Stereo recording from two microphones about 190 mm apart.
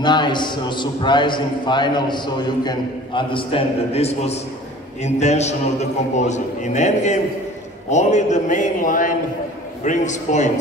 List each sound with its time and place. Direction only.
0.0 s a man's voice: 25° left (ahead or behind); by 10.5 s 40° left (ahead or behind)